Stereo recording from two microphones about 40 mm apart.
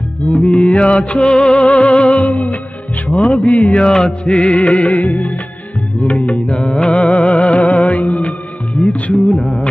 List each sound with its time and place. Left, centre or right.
0.3 s music: left
3.7 s music: left
4.3 s music: left